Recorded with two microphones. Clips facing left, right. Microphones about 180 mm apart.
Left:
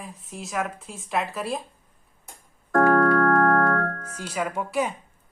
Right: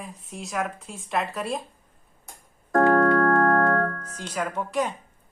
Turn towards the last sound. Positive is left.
turn(degrees=10)  # may be behind; listen again after turning